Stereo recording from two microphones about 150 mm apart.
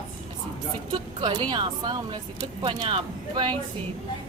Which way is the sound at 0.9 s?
30° right (ahead or behind).